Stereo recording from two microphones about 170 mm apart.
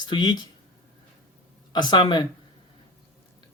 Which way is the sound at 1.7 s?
25° left (ahead or behind).